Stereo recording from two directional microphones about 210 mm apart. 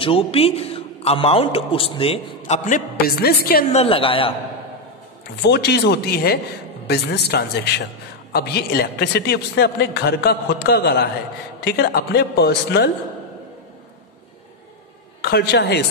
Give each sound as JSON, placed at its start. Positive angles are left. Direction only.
{"t": 0.0, "sound": "a man's voice", "side_deg": 25}
{"t": 3.7, "sound": "a man's voice", "side_deg": 25}
{"t": 5.4, "sound": "a man's voice", "side_deg": 50}
{"t": 15.2, "sound": "a man's voice", "side_deg": 50}